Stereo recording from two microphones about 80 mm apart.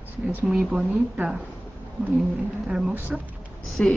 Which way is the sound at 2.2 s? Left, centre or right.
Centre.